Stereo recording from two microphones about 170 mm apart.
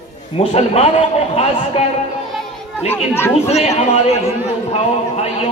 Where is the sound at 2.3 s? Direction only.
Centre (ahead or behind).